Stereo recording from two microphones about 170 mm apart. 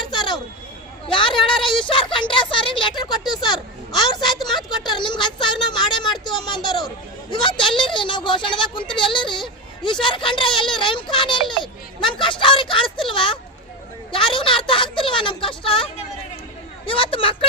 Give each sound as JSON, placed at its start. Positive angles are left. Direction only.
{"t": 0.1, "sound": "chatter", "side_deg": 25}
{"t": 1.0, "sound": "a sound", "side_deg": 30}
{"t": 7.8, "sound": "a woman's voice", "side_deg": 30}